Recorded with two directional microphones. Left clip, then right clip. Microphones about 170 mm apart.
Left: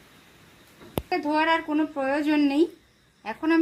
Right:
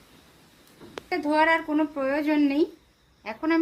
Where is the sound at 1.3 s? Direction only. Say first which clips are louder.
Right 2 dB; 35° left (ahead or behind).